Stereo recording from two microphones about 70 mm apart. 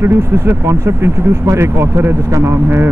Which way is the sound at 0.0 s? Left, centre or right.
Right.